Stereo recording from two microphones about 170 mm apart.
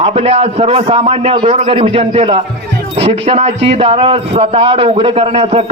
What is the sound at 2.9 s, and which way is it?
Music, 40° right (ahead or behind).